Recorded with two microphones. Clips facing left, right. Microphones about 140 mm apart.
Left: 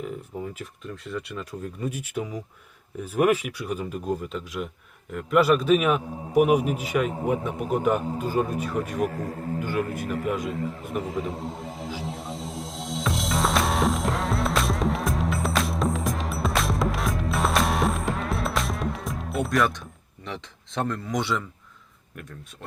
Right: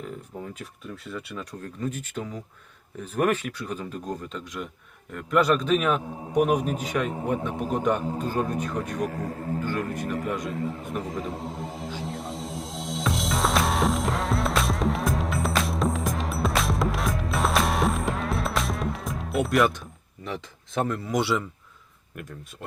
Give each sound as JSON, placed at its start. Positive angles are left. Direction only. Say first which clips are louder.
{"t": 0.0, "sound": "a man's voice", "louder": "left 3 dB", "side_deg": 0}
{"t": 9.7, "sound": "a sound", "louder": "left 1 dB", "side_deg": 5}
{"t": 22.1, "sound": "speech", "louder": "right 2 dB", "side_deg": 0}